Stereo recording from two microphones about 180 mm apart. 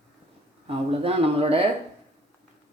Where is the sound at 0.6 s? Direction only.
30° right (ahead or behind).